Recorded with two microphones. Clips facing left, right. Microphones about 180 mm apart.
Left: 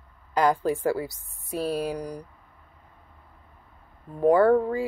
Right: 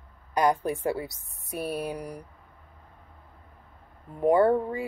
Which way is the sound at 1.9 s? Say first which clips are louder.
Left 3 dB; 25° right (ahead or behind).